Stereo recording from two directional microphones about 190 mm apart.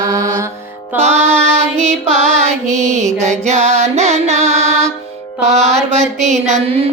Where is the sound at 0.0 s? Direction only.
15° right (ahead or behind).